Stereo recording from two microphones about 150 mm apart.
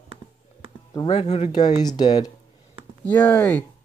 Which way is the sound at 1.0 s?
45° left (ahead or behind).